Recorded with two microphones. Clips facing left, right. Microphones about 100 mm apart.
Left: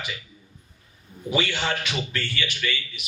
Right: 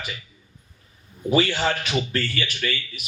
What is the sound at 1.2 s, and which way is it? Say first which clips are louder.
A man's voice: right 5 dB; 40° right (ahead or behind).